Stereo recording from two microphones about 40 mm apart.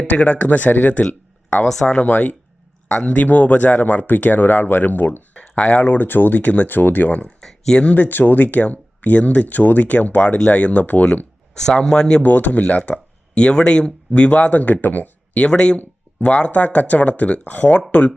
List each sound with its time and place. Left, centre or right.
0.2 s speech: left
1.6 s speech: centre
1.9 s speech: left
5.3 s speech: left
6.4 s speech: left
6.7 s speech: left
7.3 s a sound: centre
7.9 s speech: left
11.5 s speech: centre
12.2 s speech: left
15.4 s speech: left